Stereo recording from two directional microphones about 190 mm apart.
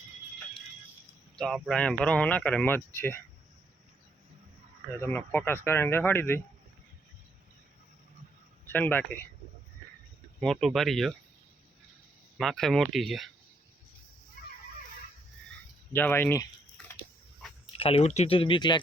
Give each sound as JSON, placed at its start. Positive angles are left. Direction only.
{"t": 1.4, "sound": "speech", "side_deg": 0}
{"t": 4.9, "sound": "speech", "side_deg": 10}
{"t": 8.7, "sound": "speech", "side_deg": 10}
{"t": 10.4, "sound": "speech", "side_deg": 0}
{"t": 12.4, "sound": "speech", "side_deg": 0}
{"t": 15.9, "sound": "speech", "side_deg": 10}
{"t": 17.7, "sound": "speech", "side_deg": 30}